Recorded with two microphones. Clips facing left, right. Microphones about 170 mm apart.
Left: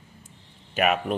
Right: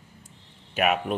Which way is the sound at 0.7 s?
Centre (ahead or behind).